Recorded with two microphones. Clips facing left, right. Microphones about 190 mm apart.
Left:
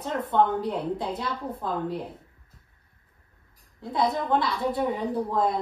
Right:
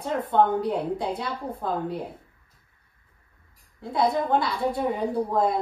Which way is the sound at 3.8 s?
Centre (ahead or behind).